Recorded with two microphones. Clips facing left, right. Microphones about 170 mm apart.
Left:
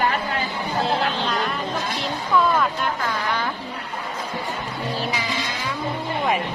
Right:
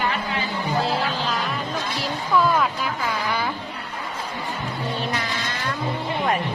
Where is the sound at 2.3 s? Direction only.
5° right (ahead or behind).